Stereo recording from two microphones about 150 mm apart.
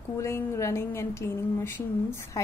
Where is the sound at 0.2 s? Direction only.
20° left (ahead or behind).